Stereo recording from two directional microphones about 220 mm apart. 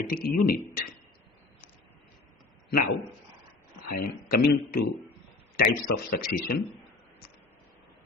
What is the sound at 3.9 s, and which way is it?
Speech, 45° left (ahead or behind).